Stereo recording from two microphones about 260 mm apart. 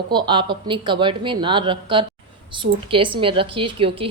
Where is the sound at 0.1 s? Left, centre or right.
Centre.